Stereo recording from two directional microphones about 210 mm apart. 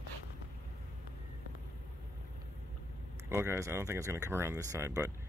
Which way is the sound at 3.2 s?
10° right (ahead or behind).